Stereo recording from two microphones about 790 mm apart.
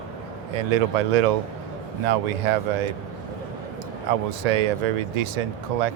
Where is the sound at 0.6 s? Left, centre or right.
Right.